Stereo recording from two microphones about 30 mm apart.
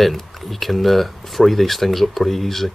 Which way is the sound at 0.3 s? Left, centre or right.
Centre.